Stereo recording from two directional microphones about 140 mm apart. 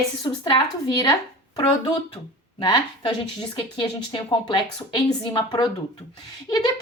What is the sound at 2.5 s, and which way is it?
A woman's voice, 35° left (ahead or behind).